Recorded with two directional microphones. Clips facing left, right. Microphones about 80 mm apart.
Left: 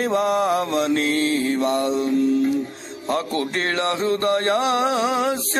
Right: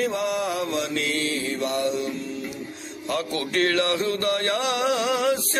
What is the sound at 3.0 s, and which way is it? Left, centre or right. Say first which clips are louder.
Music: left 4 dB; left.